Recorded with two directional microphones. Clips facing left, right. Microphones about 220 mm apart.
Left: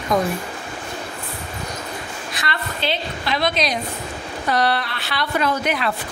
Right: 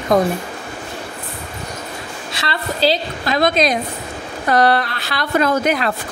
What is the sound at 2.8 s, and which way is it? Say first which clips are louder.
A woman's voice: right 8 dB; 40° right (ahead or behind).